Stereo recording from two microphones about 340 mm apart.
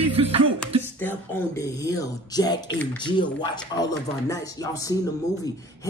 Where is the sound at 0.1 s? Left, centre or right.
Centre.